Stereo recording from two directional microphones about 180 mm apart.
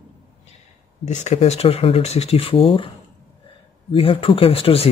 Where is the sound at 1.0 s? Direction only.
40° left (ahead or behind).